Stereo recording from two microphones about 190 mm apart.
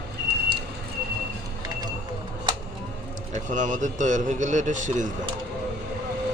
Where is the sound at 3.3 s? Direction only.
40° right (ahead or behind).